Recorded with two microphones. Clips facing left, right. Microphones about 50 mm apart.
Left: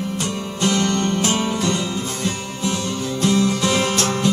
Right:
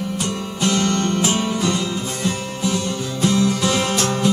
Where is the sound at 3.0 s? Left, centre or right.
Centre.